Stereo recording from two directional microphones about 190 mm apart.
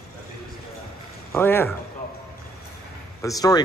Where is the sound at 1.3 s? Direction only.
10° left (ahead or behind).